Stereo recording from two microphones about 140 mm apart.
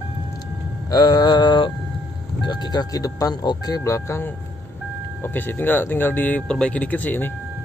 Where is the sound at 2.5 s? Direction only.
30° left (ahead or behind).